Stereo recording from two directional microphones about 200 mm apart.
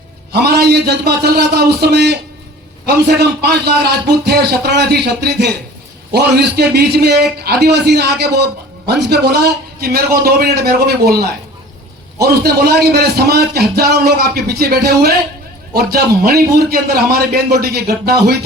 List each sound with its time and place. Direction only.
0.3 s a man's voice: 55° right (ahead or behind)